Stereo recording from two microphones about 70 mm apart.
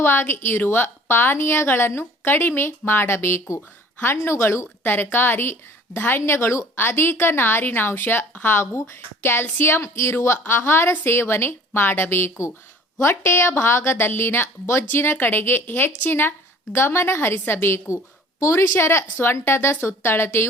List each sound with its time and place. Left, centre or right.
0.0 s a woman's voice: left